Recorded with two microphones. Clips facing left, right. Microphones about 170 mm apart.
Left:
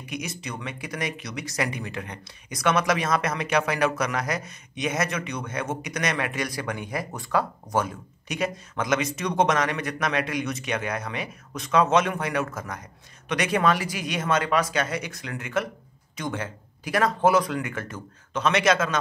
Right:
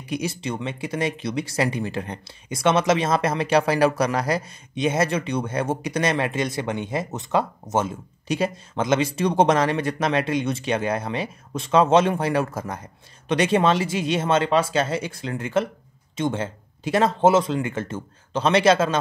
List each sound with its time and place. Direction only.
0.0 s speech: 30° right (ahead or behind)